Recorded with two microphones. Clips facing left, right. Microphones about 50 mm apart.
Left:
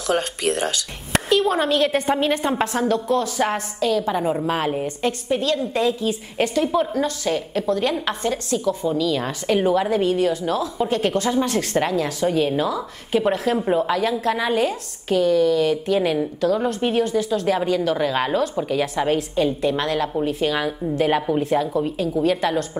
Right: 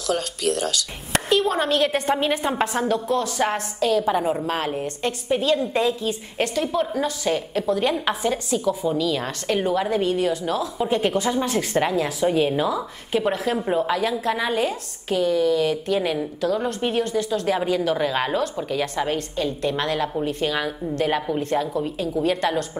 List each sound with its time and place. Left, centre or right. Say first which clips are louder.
0.0 s speech: left 2 dB; left
1.1 s a woman's voice: left 2 dB; centre
5.3 s a woman's voice: right 3 dB; centre